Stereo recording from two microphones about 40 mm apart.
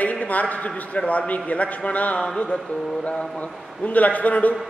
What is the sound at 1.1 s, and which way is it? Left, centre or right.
A man's voice, left.